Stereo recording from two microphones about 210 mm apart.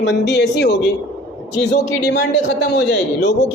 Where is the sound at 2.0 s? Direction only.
55° left (ahead or behind).